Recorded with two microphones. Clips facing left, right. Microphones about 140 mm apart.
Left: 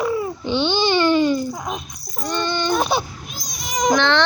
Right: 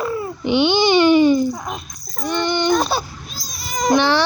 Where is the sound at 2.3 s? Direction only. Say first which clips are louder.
Right 3 dB; 15° right (ahead or behind).